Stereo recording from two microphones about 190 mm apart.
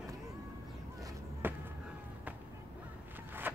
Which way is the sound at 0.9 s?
15° right (ahead or behind).